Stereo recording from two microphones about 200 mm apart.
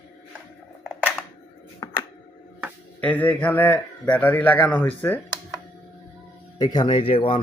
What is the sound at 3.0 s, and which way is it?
A man's voice, 5° left (ahead or behind).